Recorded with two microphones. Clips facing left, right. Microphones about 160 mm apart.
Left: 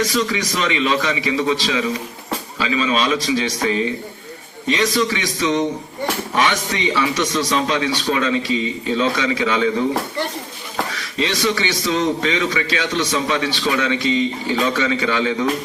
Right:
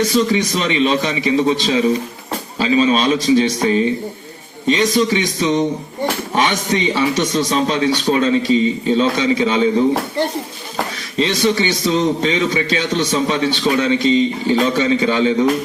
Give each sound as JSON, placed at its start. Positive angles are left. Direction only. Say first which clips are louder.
{"t": 0.0, "sound": "a man's voice", "louder": "right 5 dB", "side_deg": -25}
{"t": 11.2, "sound": "a man's voice", "louder": "right 4 dB", "side_deg": -25}